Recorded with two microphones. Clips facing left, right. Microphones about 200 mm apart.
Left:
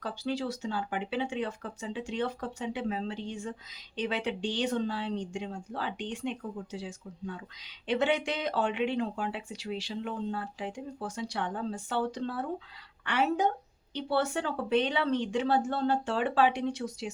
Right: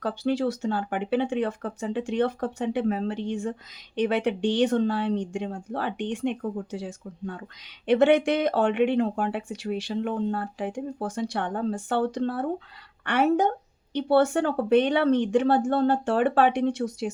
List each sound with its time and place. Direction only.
0.0 s speech: 60° right (ahead or behind)